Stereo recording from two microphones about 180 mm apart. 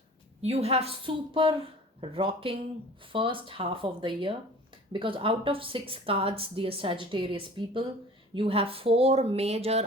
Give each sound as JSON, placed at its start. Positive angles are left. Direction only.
{"t": 0.4, "sound": "a woman's voice", "side_deg": -35}